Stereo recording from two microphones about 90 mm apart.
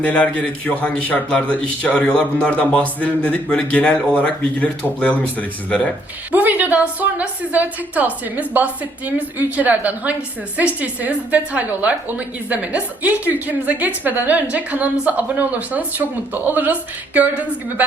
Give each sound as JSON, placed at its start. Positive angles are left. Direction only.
{"t": 0.0, "sound": "a man's voice", "side_deg": 15}
{"t": 6.3, "sound": "a woman's voice", "side_deg": -20}